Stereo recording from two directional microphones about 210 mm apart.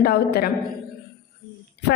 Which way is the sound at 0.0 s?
45° left (ahead or behind).